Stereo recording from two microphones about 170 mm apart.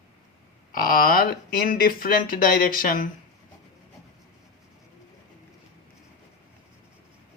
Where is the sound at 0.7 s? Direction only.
60° left (ahead or behind).